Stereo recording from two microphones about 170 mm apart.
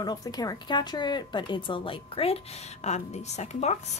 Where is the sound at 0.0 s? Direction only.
25° left (ahead or behind); by 3.7 s 40° left (ahead or behind).